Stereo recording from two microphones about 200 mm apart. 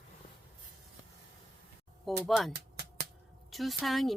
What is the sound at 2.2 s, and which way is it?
Speech, centre (ahead or behind).